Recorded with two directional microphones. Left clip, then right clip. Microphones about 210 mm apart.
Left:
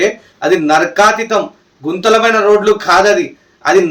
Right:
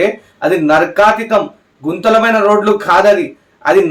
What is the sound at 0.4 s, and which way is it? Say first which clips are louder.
Speech: even; 5° right (ahead or behind).